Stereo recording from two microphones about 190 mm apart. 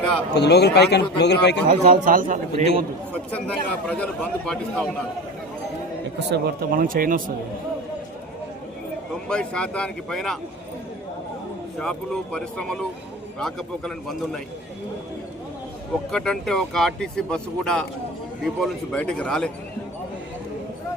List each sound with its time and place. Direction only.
0.3 s a man's voice: 60° left (ahead or behind)
1.6 s a man's voice: 45° right (ahead or behind)
3.3 s speech: 5° left (ahead or behind)
6.3 s a man's voice: 55° right (ahead or behind)
9.3 s speech: 5° left (ahead or behind)
11.8 s speech: 5° left (ahead or behind)
16.1 s speech: 5° left (ahead or behind)